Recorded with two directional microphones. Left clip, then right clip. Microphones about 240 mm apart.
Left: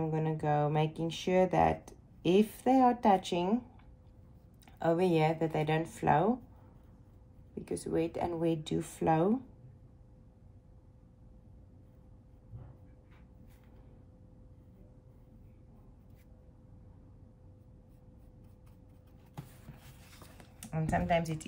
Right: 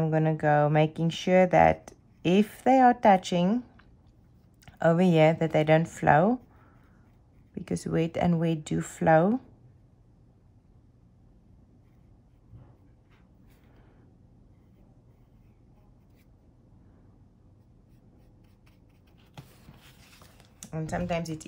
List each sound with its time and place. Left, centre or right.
0.0 s speech: right
7.5 s speech: right
20.0 s a sound: centre
20.6 s speech: centre